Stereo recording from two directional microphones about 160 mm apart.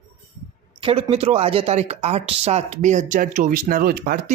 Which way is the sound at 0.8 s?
35° right (ahead or behind).